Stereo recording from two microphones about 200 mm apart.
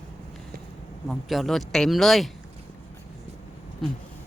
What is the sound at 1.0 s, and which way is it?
Speech, centre (ahead or behind).